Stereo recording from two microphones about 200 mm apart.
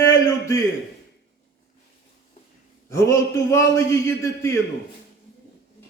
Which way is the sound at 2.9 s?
15° left (ahead or behind).